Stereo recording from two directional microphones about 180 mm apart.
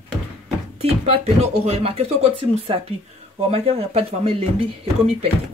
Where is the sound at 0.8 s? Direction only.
35° right (ahead or behind).